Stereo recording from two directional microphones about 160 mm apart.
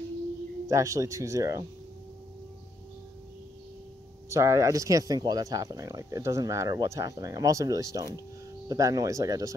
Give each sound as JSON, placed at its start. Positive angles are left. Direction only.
{"t": 0.7, "sound": "speech", "side_deg": -20}
{"t": 4.3, "sound": "speech", "side_deg": -20}